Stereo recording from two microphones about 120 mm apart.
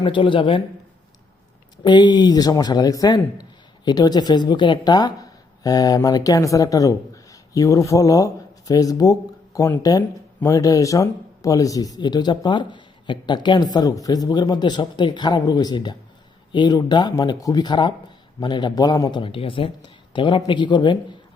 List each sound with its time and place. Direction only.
0.0 s speech: 45° left (ahead or behind)
1.8 s speech: 40° left (ahead or behind)